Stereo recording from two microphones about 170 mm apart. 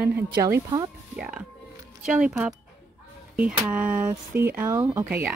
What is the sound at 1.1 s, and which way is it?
Speech, 5° right (ahead or behind).